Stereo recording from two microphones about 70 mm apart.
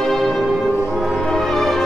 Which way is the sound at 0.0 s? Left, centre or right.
Centre.